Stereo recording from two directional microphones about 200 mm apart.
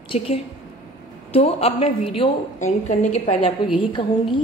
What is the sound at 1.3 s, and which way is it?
A woman's voice, 30° left (ahead or behind).